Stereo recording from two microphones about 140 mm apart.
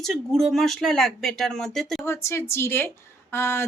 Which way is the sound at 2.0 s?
20° left (ahead or behind).